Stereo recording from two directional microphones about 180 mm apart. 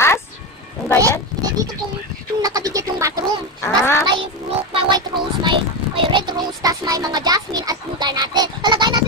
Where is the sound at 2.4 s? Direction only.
20° right (ahead or behind).